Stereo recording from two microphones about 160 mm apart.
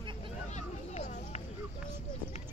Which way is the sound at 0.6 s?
45° left (ahead or behind).